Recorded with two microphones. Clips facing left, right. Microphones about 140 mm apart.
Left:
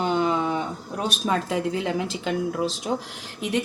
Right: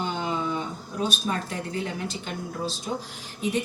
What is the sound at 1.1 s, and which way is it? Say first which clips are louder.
A woman's voice: left 5 dB; 90° left.